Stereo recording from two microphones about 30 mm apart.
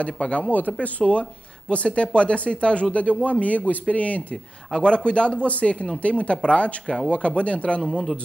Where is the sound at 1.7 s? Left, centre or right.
Left.